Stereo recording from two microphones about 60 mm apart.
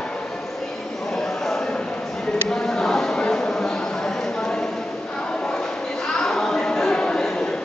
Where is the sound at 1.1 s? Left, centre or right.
Centre.